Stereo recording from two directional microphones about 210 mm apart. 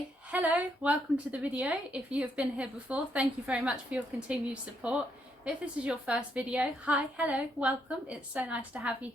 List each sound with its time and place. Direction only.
0.3 s a woman's voice: 5° right (ahead or behind)